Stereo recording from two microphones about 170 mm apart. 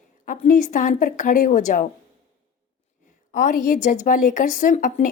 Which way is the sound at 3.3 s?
50° left (ahead or behind).